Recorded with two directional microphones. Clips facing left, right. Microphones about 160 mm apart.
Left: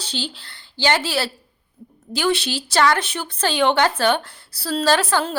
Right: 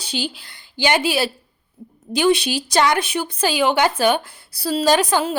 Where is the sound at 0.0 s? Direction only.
10° right (ahead or behind).